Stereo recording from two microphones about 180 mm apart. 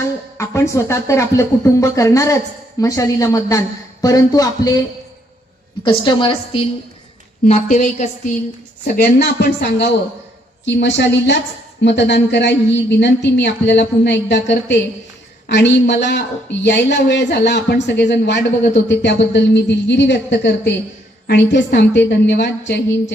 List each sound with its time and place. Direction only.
0.3 s a woman's voice: 15° left (ahead or behind)
5.8 s a woman's voice: 25° left (ahead or behind)
7.4 s a woman's voice: 40° left (ahead or behind)
9.2 s speech: 70° left (ahead or behind)